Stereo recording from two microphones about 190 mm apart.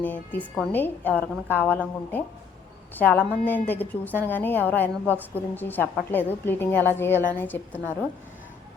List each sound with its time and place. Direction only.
0.0 s a woman's voice: 10° left (ahead or behind)